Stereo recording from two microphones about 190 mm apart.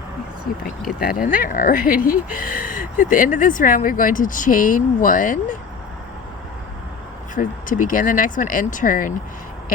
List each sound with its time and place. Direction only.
0.9 s speech: 50° left (ahead or behind)
7.3 s speech: 45° left (ahead or behind)